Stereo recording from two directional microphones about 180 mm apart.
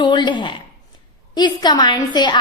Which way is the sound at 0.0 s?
25° left (ahead or behind).